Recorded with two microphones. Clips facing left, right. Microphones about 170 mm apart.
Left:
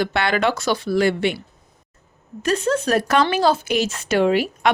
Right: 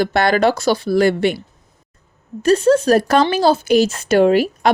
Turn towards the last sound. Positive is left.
turn(degrees=-40)  # may be behind; listen again after turning